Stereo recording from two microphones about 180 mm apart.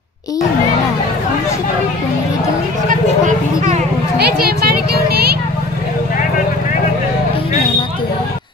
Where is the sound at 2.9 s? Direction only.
45° right (ahead or behind).